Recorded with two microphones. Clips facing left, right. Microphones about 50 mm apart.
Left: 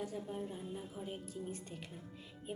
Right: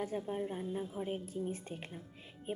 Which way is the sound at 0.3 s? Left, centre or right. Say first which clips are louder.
Right 5 dB; right.